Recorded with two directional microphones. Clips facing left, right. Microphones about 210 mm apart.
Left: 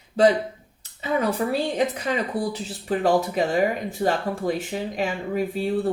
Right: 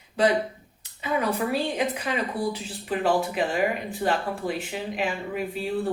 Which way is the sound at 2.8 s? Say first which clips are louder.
Left 3 dB; 40° left (ahead or behind).